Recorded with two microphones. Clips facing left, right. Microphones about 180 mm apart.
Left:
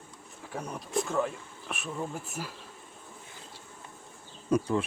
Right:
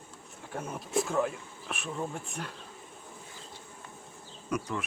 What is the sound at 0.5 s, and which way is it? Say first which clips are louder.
Speech: right 1 dB; 5° right (ahead or behind).